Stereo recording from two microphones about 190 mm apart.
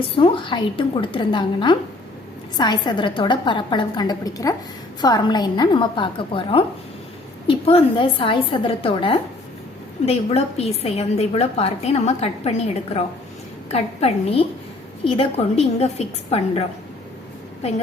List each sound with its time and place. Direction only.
0.2 s a woman's voice: 25° left (ahead or behind)